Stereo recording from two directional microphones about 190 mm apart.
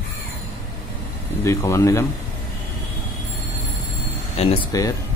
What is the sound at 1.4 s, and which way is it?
Speech, 15° left (ahead or behind).